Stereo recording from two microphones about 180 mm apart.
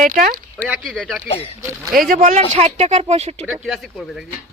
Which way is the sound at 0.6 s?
5° right (ahead or behind).